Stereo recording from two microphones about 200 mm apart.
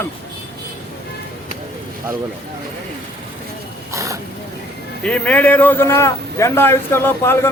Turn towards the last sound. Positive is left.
turn(degrees=10)  # may be behind; listen again after turning